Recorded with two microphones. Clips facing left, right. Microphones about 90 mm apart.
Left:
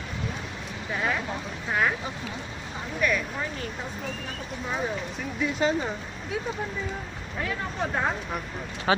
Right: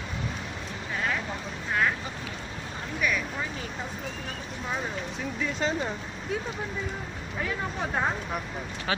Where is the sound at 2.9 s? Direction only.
5° right (ahead or behind).